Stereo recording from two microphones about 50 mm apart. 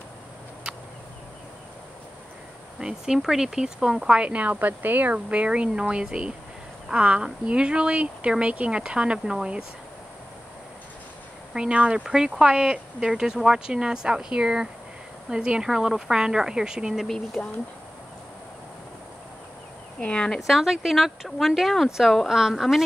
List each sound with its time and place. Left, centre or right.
2.8 s speech: centre
4.1 s speech: right
11.5 s speech: centre
17.0 s speech: centre
20.0 s speech: left
20.3 s speech: centre